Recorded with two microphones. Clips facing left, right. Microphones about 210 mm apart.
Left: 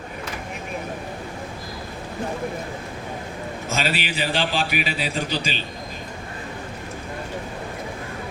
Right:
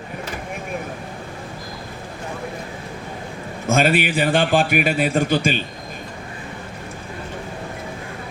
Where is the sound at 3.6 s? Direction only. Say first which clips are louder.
Right 9 dB; 50° right (ahead or behind).